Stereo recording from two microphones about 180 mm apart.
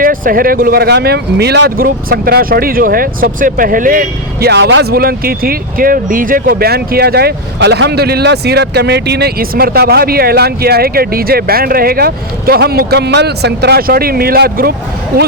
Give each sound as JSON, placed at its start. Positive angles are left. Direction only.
{"t": 0.0, "sound": "speech", "side_deg": -50}